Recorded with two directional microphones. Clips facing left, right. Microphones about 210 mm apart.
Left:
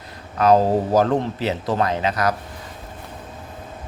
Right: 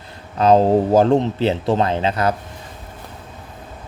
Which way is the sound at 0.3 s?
25° right (ahead or behind).